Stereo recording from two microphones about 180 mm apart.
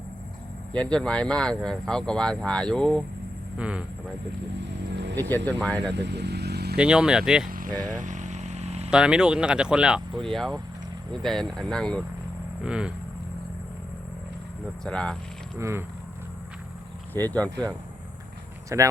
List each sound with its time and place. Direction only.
0.7 s speech: 5° left (ahead or behind)
3.6 s speech: 5° right (ahead or behind)
4.6 s vehicle: 75° right (ahead or behind)
5.5 s speech: 10° left (ahead or behind)
6.0 s speech: 70° right (ahead or behind)
6.7 s speech: 5° right (ahead or behind)
7.4 s a sound: 50° right (ahead or behind)
8.9 s speech: 5° right (ahead or behind)
14.8 s speech: 5° left (ahead or behind)
15.5 s speech: 15° right (ahead or behind)
17.2 s speech: 10° left (ahead or behind)
18.7 s speech: 15° right (ahead or behind)